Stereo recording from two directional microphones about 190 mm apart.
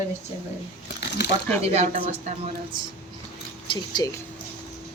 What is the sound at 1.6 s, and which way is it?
Speech, 35° right (ahead or behind).